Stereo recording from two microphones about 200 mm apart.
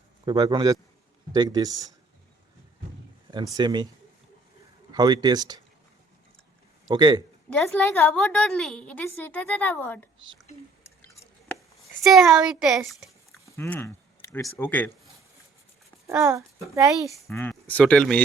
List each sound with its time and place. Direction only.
0.3 s a man's voice: 25° right (ahead or behind)
3.5 s a man's voice: 20° right (ahead or behind)
4.9 s a man's voice: 20° right (ahead or behind)
6.8 s a man's voice: 20° right (ahead or behind)
7.5 s a woman's voice: 5° left (ahead or behind)
12.0 s speech: centre (ahead or behind)
13.6 s speech: 10° left (ahead or behind)
16.0 s a child's voice: 15° right (ahead or behind)
17.3 s a woman's voice: 10° left (ahead or behind)